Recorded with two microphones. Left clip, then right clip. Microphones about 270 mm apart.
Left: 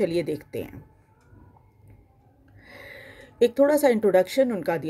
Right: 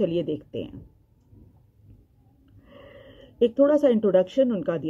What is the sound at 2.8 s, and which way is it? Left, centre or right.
Speech, left.